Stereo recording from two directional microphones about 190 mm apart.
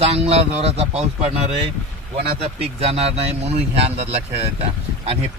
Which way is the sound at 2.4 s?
30° right (ahead or behind).